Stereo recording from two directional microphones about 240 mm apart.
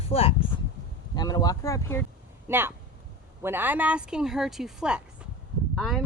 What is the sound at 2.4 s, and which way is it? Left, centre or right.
Speech, centre.